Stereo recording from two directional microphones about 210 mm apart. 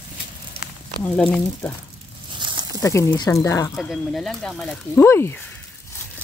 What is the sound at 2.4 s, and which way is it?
Snake, 20° right (ahead or behind).